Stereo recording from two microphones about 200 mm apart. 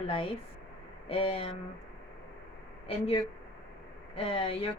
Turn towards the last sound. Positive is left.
turn(degrees=30)  # may be behind; listen again after turning